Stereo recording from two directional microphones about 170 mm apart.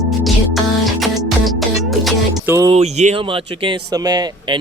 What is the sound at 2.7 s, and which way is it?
Speech, 40° right (ahead or behind).